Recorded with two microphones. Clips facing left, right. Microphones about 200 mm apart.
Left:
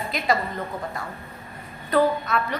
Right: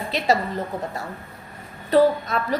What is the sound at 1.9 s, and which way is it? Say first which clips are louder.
Speech: right 3 dB; 35° right (ahead or behind).